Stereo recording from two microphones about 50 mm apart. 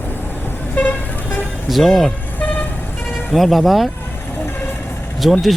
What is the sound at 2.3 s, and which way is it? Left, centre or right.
Vehicle, left.